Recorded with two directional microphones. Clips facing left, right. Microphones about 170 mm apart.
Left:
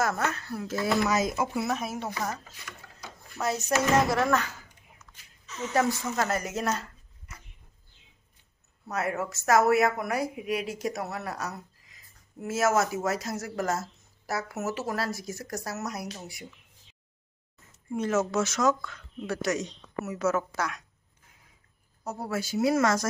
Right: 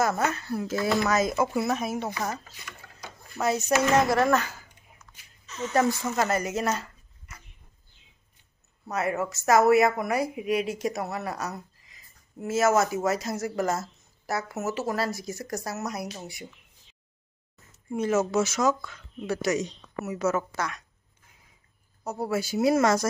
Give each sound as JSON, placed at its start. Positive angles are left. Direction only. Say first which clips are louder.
{"t": 0.0, "sound": "speech", "louder": "right 3 dB", "side_deg": 0}
{"t": 1.0, "sound": "speech", "louder": "right 2 dB", "side_deg": 10}
{"t": 5.6, "sound": "speech", "louder": "right 2 dB", "side_deg": 5}
{"t": 8.9, "sound": "speech", "louder": "right 2 dB", "side_deg": 0}
{"t": 17.9, "sound": "speech", "louder": "right 2 dB", "side_deg": -5}
{"t": 22.0, "sound": "speech", "louder": "right 4 dB", "side_deg": -5}
{"t": 22.7, "sound": "speech", "louder": "right 3 dB", "side_deg": -20}